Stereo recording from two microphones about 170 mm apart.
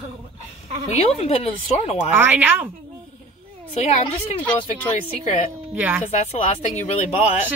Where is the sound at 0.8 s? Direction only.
40° left (ahead or behind).